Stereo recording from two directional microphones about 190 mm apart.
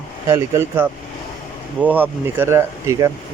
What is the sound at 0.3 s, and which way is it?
Speech, 15° right (ahead or behind).